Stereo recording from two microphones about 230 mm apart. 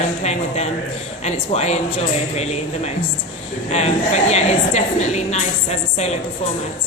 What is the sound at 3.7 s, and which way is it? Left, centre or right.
A woman's voice, left.